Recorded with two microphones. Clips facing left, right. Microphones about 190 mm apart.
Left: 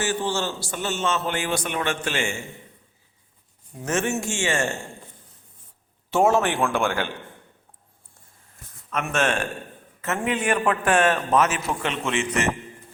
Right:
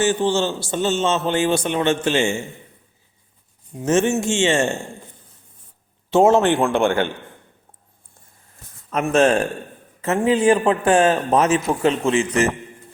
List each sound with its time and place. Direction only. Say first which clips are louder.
0.0 s a man's voice: right 7 dB; 20° right (ahead or behind)
3.8 s a man's voice: right 7 dB; 25° right (ahead or behind)
6.1 s a man's voice: right 6 dB; 20° right (ahead or behind)
8.9 s a man's voice: right 8 dB; 35° right (ahead or behind)